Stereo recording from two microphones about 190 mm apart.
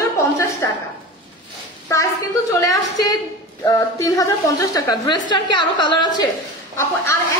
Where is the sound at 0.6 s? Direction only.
15° left (ahead or behind).